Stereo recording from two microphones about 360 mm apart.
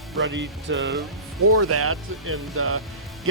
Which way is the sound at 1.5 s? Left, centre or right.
Right.